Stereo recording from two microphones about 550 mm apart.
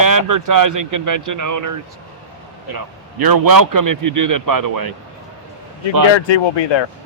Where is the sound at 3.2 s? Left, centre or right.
Right.